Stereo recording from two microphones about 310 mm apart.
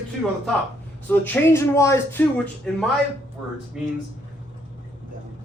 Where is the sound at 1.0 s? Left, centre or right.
Centre.